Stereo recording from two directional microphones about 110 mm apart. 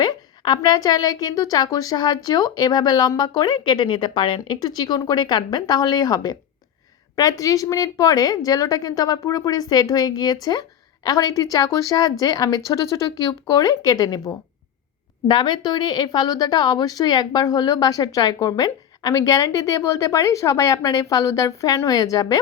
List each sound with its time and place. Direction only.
0.0 s a woman's voice: 40° left (ahead or behind)
15.3 s a woman's voice: 45° left (ahead or behind)